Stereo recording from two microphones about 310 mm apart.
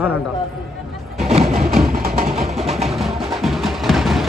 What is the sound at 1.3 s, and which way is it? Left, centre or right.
Music, centre.